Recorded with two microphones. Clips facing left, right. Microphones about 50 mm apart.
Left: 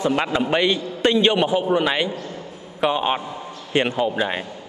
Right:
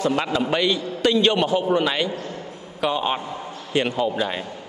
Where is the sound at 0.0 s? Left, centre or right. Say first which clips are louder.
Left 1 dB; left.